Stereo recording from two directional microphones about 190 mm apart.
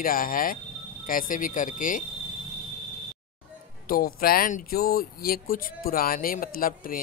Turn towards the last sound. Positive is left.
turn(degrees=45)  # may be behind; listen again after turning